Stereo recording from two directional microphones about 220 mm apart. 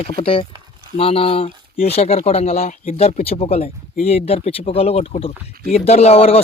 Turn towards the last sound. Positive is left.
turn(degrees=25)  # may be behind; listen again after turning